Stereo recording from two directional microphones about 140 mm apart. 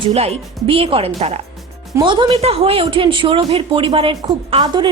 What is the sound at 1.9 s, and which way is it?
Speech, 35° right (ahead or behind).